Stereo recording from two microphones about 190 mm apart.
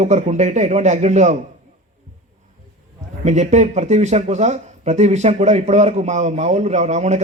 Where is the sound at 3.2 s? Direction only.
35° right (ahead or behind).